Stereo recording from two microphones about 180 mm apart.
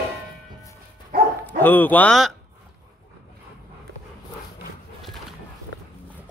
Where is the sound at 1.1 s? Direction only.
55° right (ahead or behind).